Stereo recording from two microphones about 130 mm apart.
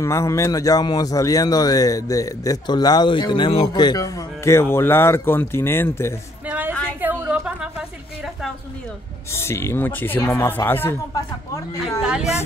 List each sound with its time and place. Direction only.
0.0 s speech: 20° left (ahead or behind)
7.0 s a sound: 15° right (ahead or behind)
9.3 s speech: 20° left (ahead or behind)
12.0 s speech: 5° right (ahead or behind)